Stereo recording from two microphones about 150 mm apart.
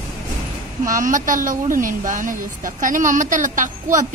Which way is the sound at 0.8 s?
60° right (ahead or behind).